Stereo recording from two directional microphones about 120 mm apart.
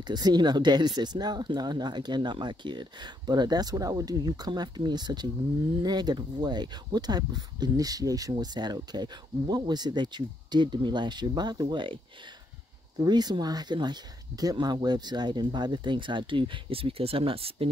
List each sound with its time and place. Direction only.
0.0 s speech: 35° right (ahead or behind)
13.0 s speech: 35° right (ahead or behind); by 17.6 s 50° right (ahead or behind)